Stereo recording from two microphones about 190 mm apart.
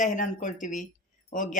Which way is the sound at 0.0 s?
40° left (ahead or behind).